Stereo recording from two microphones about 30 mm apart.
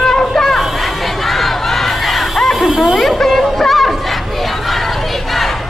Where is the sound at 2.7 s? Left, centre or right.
Centre.